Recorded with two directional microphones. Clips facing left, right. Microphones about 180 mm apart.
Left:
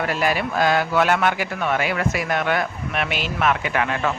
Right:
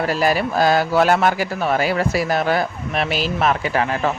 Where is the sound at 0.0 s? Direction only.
35° right (ahead or behind).